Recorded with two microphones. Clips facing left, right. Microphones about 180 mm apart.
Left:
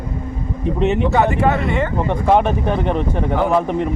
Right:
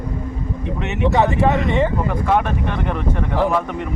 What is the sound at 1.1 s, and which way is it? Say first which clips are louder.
Speech: even; centre (ahead or behind).